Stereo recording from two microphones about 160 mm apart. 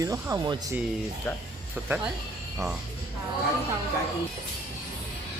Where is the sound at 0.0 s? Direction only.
20° right (ahead or behind).